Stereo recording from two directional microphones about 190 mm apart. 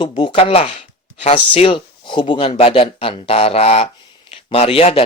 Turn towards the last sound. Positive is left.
turn(degrees=30)  # may be behind; listen again after turning